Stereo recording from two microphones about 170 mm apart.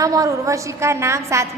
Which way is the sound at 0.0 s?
20° right (ahead or behind).